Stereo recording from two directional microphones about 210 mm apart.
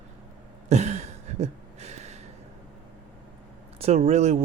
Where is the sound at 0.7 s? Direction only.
30° right (ahead or behind).